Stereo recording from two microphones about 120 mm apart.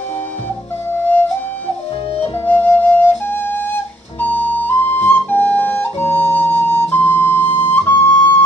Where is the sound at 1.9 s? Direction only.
55° left (ahead or behind).